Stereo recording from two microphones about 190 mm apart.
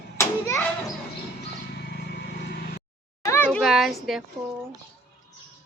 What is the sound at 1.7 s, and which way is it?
Vehicle, 60° left (ahead or behind).